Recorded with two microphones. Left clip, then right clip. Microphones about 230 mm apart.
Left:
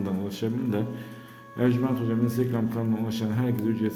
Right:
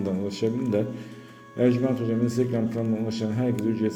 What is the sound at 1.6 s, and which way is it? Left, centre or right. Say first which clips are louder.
A man's voice: right 3 dB; centre.